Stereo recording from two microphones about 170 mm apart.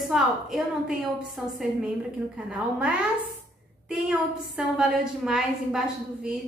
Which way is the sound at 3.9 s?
5° right (ahead or behind).